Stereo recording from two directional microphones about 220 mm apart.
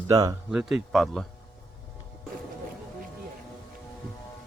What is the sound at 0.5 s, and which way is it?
Speech, 5° right (ahead or behind).